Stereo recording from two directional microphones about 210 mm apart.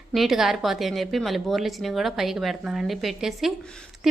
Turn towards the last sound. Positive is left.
turn(degrees=0)  # may be behind; listen again after turning